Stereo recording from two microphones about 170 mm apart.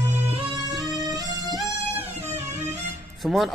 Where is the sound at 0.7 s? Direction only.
25° right (ahead or behind).